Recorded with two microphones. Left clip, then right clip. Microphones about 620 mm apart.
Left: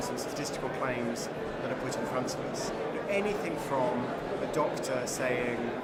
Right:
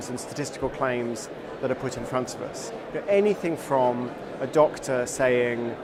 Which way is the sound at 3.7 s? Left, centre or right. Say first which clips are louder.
Right 8 dB; right.